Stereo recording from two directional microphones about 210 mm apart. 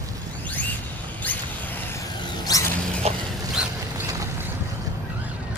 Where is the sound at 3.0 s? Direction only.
30° right (ahead or behind).